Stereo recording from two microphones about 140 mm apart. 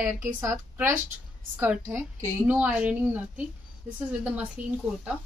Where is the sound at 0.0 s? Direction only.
20° right (ahead or behind).